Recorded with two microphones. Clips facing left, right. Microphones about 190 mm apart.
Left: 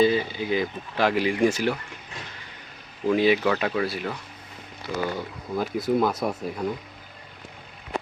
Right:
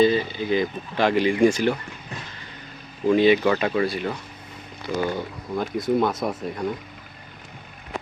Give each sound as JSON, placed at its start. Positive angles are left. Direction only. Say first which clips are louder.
{"t": 0.0, "sound": "speech", "louder": "right 2 dB", "side_deg": 10}
{"t": 3.1, "sound": "speech", "louder": "right 3 dB", "side_deg": 5}
{"t": 4.9, "sound": "speech", "louder": "right 3 dB", "side_deg": -10}
{"t": 5.5, "sound": "speech", "louder": "right 1 dB", "side_deg": 0}